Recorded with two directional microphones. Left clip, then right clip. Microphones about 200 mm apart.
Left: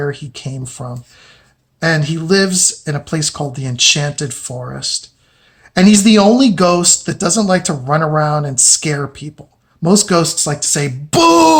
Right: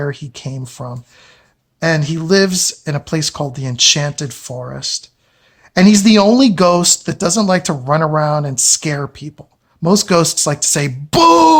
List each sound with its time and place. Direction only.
0.0 s speech: 30° right (ahead or behind)
11.1 s speech: 25° right (ahead or behind)